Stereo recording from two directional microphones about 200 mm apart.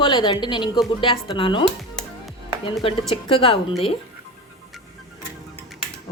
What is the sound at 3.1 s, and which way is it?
Speech, 25° left (ahead or behind).